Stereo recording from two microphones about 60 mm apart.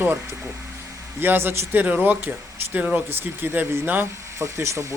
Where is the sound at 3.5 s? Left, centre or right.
Right.